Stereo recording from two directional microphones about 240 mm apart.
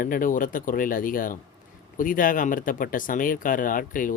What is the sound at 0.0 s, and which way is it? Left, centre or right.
Speech, left.